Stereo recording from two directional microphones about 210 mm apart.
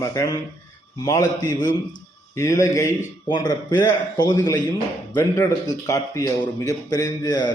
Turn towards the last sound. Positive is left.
turn(degrees=20)  # may be behind; listen again after turning